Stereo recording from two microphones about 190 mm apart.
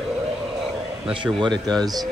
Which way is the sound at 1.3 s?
20° right (ahead or behind).